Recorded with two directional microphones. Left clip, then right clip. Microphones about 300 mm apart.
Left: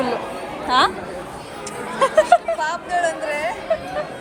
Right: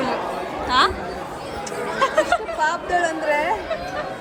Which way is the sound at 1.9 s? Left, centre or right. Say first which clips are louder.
Left 3 dB; centre.